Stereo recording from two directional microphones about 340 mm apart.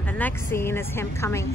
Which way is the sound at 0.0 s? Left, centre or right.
Centre.